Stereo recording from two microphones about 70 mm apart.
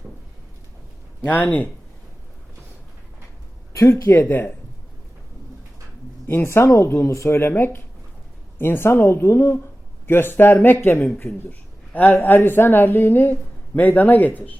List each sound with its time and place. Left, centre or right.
1.2 s a woman's voice: left
3.7 s speech: left
6.2 s a woman's voice: left